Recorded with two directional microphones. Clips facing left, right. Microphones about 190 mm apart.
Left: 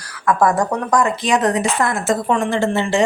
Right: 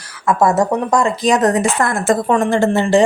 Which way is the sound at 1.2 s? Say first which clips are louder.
Right 3 dB; 40° right (ahead or behind).